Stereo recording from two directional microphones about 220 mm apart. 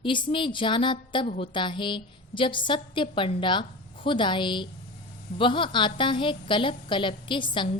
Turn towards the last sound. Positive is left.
turn(degrees=20)  # may be behind; listen again after turning